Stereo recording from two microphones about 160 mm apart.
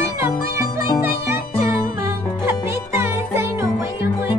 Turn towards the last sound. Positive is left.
turn(degrees=-15)  # may be behind; listen again after turning